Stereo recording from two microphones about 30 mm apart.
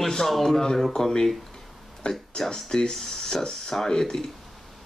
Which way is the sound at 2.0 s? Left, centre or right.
Left.